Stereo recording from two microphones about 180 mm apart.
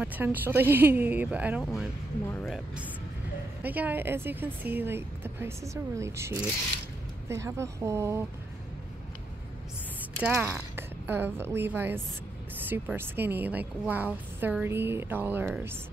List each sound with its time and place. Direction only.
0.0 s a woman's voice: 10° right (ahead or behind); by 2.5 s 10° left (ahead or behind)
2.5 s a woman's voice: 5° right (ahead or behind)
10.2 s a woman's voice: 5° right (ahead or behind)